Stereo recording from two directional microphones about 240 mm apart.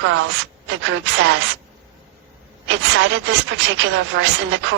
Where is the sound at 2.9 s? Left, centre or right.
Right.